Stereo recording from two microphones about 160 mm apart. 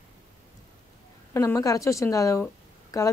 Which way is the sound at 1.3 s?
15° left (ahead or behind).